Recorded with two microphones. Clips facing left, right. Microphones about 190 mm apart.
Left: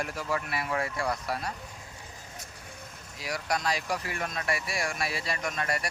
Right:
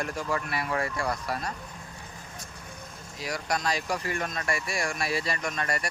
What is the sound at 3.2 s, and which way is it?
Speech, centre (ahead or behind).